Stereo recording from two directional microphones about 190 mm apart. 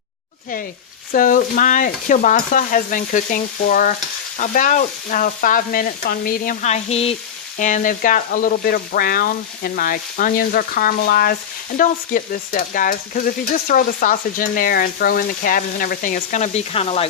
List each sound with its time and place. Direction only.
1.1 s stir: 45° left (ahead or behind)